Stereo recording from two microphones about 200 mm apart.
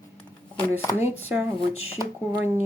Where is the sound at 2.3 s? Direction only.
10° right (ahead or behind).